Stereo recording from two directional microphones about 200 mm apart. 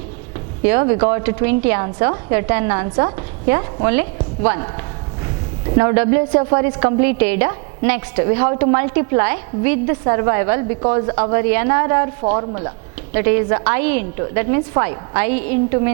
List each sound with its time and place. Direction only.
0.6 s a woman's voice: 15° right (ahead or behind)
5.7 s a woman's voice: 15° right (ahead or behind)
13.1 s a woman's voice: 15° right (ahead or behind)